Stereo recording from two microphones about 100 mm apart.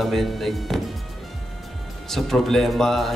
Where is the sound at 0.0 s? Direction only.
Centre (ahead or behind).